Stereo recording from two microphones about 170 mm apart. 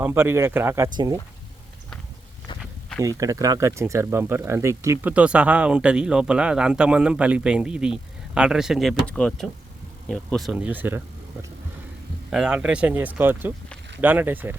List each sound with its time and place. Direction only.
0.0 s speech: 15° right (ahead or behind)
2.5 s walk: 25° left (ahead or behind)
3.0 s speech: 20° right (ahead or behind)
12.3 s speech: 5° right (ahead or behind)